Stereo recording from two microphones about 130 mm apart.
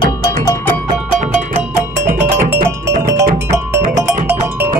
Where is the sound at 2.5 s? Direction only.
20° right (ahead or behind).